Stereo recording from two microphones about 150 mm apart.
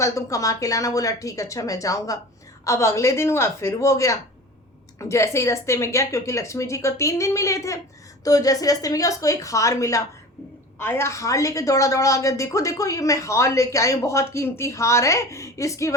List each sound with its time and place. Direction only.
0.0 s a woman's voice: 20° left (ahead or behind)